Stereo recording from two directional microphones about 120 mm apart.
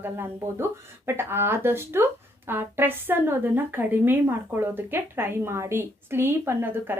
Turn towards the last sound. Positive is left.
turn(degrees=-20)  # may be behind; listen again after turning